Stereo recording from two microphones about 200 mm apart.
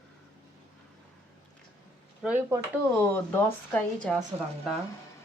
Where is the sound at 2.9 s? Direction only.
10° left (ahead or behind).